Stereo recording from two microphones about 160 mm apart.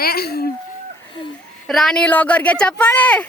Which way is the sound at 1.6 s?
Centre (ahead or behind).